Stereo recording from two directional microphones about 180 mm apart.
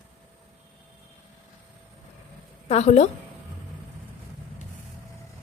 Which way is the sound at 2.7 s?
40° left (ahead or behind).